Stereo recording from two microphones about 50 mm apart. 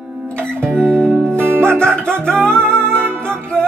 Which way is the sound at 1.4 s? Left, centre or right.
Right.